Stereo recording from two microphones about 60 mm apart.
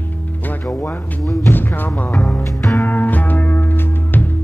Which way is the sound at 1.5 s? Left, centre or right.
Left.